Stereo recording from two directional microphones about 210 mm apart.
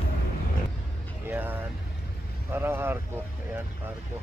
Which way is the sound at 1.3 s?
10° right (ahead or behind).